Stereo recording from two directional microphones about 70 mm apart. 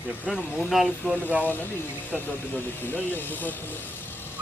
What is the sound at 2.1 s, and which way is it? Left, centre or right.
Speech, left.